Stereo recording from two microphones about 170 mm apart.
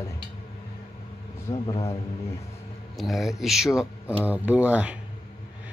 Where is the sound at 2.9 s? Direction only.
Centre (ahead or behind).